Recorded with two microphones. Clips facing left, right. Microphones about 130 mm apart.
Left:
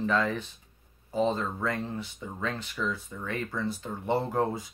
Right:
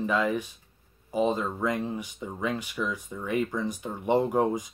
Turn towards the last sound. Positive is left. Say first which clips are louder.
# right 3 dB
turn(degrees=-15)  # may be behind; listen again after turning